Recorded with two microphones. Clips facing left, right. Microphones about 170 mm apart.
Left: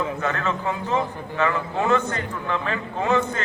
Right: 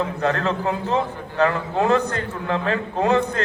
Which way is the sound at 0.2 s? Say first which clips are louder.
Right 4 dB; 35° right (ahead or behind).